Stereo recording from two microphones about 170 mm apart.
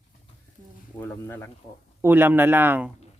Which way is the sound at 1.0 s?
10° left (ahead or behind).